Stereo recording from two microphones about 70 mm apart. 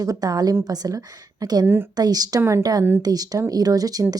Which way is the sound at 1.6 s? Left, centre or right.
Right.